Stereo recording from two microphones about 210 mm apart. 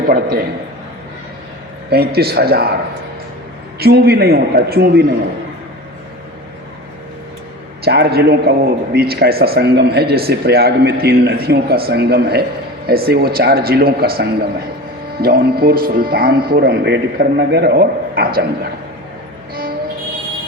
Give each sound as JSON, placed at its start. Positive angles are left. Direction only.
{"t": 0.1, "sound": "a man's voice", "side_deg": -45}
{"t": 1.9, "sound": "a man's voice", "side_deg": -50}
{"t": 3.8, "sound": "a man's voice", "side_deg": -50}
{"t": 7.9, "sound": "a man's voice", "side_deg": -50}